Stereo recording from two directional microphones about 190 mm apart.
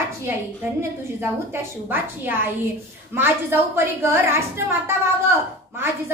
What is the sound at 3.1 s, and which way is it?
Speech, 10° right (ahead or behind).